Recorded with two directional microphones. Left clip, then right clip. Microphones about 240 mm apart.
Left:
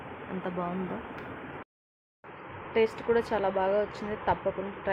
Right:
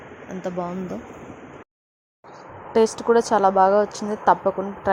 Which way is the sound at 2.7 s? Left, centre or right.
Right.